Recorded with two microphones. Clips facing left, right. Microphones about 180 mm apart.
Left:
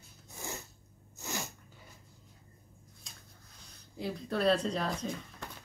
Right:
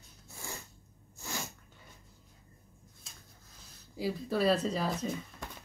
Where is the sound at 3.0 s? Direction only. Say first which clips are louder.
Left 1 dB; 5° right (ahead or behind).